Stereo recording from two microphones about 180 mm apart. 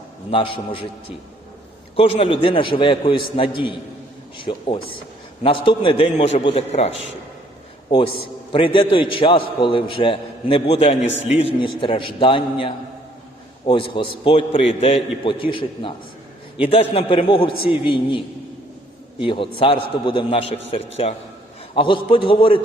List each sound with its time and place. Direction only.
0.3 s a man's voice: 30° left (ahead or behind)
2.0 s a man's voice: 30° left (ahead or behind)
19.2 s a man's voice: 30° left (ahead or behind)